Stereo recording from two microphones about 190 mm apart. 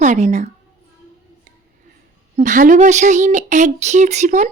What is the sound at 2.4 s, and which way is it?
Speech, 45° right (ahead or behind).